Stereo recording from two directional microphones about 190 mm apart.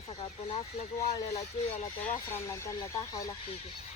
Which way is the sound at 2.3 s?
15° left (ahead or behind).